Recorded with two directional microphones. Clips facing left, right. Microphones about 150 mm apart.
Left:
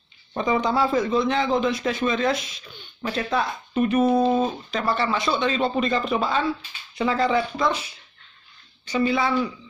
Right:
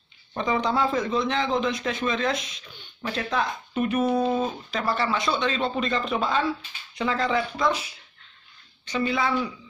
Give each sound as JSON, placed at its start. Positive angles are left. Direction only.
{"t": 0.4, "sound": "a man's voice", "side_deg": 5}
{"t": 4.0, "sound": "speech", "side_deg": 25}
{"t": 4.6, "sound": "a man's voice", "side_deg": 0}